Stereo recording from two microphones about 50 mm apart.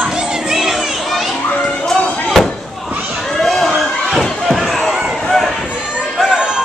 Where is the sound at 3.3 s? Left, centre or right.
Centre.